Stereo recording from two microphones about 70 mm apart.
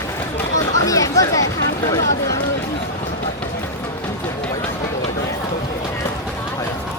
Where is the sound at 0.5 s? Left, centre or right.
Left.